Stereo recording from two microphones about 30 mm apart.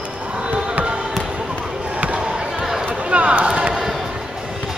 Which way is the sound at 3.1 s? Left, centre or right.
Right.